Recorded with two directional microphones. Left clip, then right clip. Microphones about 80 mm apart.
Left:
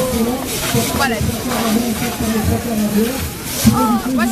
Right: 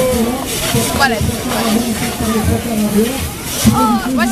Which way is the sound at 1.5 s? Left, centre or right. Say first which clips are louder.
Right 2 dB; centre.